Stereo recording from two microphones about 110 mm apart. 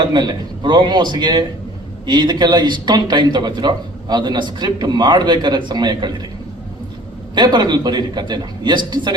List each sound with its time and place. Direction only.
0.1 s a man's voice: 40° right (ahead or behind)
7.3 s a man's voice: 40° right (ahead or behind)